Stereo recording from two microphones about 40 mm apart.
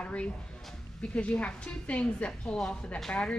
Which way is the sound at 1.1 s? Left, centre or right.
Left.